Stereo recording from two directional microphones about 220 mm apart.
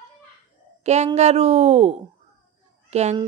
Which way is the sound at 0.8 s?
30° right (ahead or behind).